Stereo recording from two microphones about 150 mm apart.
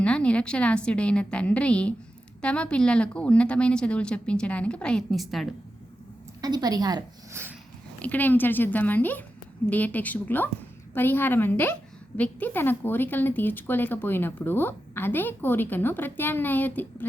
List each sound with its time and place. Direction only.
0.0 s a woman's voice: 10° left (ahead or behind)
6.4 s a woman's voice: 25° right (ahead or behind)
7.9 s a woman's voice: 10° left (ahead or behind)